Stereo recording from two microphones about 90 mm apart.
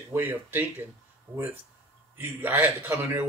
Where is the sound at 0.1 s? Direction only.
25° right (ahead or behind).